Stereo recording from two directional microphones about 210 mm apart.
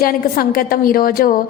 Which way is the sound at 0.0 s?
45° left (ahead or behind).